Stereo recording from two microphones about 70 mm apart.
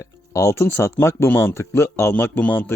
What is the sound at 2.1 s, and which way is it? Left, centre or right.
Speech, left.